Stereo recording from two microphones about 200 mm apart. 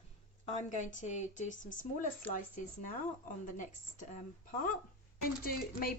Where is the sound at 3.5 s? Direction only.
40° left (ahead or behind).